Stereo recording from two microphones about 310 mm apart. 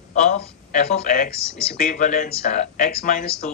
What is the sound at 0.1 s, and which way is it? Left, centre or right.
Speech, left.